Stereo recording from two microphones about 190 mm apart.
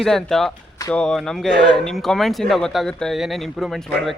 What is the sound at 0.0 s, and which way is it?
Speech, centre (ahead or behind).